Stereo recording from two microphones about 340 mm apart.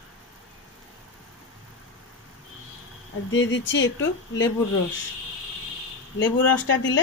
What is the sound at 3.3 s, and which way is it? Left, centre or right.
Speech, left.